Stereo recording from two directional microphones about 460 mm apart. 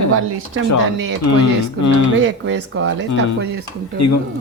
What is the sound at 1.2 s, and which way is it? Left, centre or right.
Speech, left.